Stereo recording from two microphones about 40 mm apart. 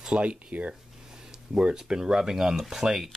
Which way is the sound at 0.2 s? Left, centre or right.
Right.